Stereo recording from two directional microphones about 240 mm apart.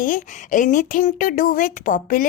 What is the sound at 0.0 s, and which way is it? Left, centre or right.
A woman's voice, left.